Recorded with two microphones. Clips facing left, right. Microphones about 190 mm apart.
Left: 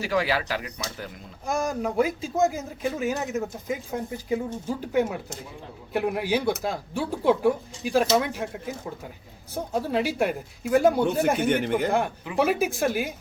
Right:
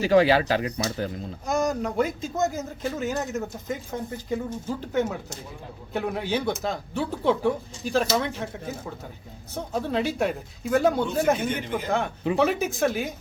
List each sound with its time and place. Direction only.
0.0 s speech: 25° right (ahead or behind)
1.5 s speech: 10° left (ahead or behind)
11.4 s speech: 60° left (ahead or behind)
11.9 s speech: 10° left (ahead or behind)